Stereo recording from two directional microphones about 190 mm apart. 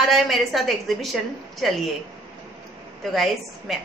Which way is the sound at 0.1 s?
Centre (ahead or behind).